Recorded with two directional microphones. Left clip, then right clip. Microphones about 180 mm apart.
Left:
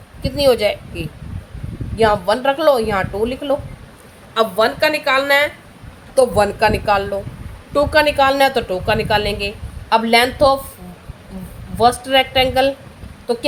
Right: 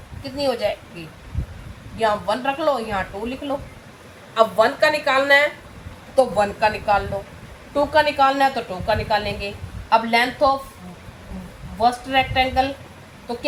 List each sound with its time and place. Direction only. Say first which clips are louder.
0.2 s a woman's voice: left 8 dB; 70° left (ahead or behind)
2.0 s a woman's voice: left 6 dB; 75° left (ahead or behind)
4.4 s a woman's voice: left 1 dB; 40° left (ahead or behind)
6.1 s a woman's voice: left 4 dB; 75° left (ahead or behind)
7.7 s a woman's voice: left 4 dB; 65° left (ahead or behind)
11.8 s a woman's voice: left 5 dB; 75° left (ahead or behind)